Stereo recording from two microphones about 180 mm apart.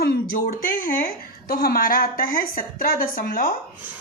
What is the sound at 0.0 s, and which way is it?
Speech, 55° left (ahead or behind).